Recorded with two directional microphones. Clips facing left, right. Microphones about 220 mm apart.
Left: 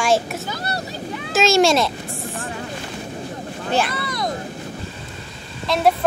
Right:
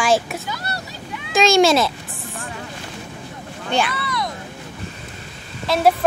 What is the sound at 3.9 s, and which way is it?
Vehicle, 45° left (ahead or behind).